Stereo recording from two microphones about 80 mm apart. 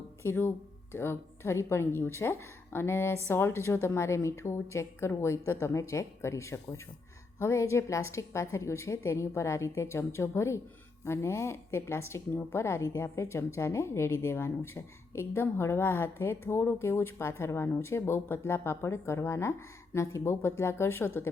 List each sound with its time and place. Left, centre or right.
0.2 s a woman's voice: left